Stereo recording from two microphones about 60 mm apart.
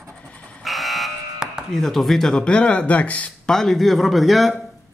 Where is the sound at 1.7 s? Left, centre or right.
Centre.